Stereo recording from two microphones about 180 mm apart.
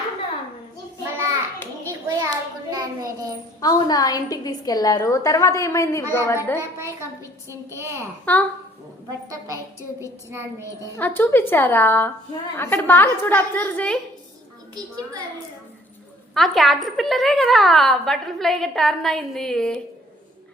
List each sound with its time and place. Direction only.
1.9 s a sound: 20° right (ahead or behind)
3.6 s a woman's voice: 20° left (ahead or behind)
7.5 s a woman's voice: 15° right (ahead or behind)
8.2 s a woman's voice: 10° left (ahead or behind)
9.0 s a woman's voice: 20° right (ahead or behind)
10.6 s a woman's voice: 15° left (ahead or behind)
16.3 s a woman's voice: centre (ahead or behind)